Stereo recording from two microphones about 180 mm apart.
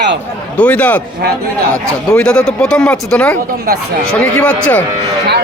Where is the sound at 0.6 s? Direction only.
5° left (ahead or behind).